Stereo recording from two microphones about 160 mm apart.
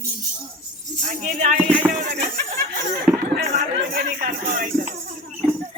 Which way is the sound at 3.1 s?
5° right (ahead or behind).